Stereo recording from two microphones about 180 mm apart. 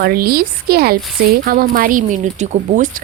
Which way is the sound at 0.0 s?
55° right (ahead or behind).